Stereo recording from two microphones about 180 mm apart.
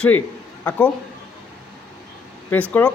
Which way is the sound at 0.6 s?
10° left (ahead or behind).